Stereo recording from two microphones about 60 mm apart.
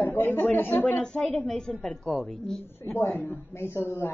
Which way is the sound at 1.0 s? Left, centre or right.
Centre.